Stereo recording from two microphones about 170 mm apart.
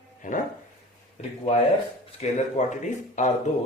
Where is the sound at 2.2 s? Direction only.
45° left (ahead or behind).